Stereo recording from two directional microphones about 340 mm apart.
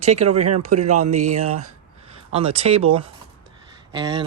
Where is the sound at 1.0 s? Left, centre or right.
Centre.